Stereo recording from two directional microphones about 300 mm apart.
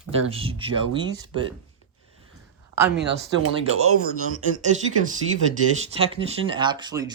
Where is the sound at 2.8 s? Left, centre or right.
Right.